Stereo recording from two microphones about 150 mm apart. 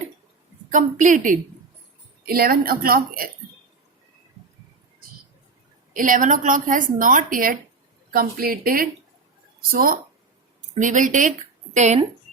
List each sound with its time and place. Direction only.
0.7 s a woman's voice: 55° right (ahead or behind)
2.2 s a woman's voice: 85° right
5.9 s a woman's voice: 65° right (ahead or behind)
10.8 s a woman's voice: 60° right (ahead or behind)